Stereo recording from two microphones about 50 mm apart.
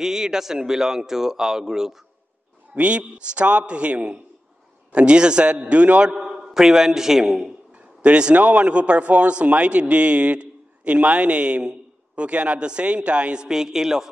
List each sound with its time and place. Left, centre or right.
0.0 s a man's voice: centre
2.7 s a man's voice: right; by 7.5 s centre
7.7 s a man's voice: right